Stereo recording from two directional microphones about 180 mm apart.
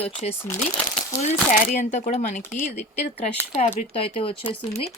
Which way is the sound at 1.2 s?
50° left (ahead or behind).